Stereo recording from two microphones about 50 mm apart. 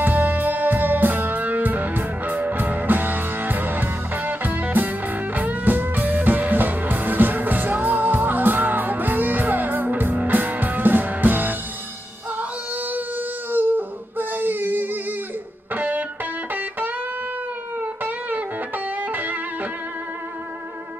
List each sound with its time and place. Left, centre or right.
0.0 s music: right
13.5 s a sound: right
15.7 s music: right
17.7 s music: right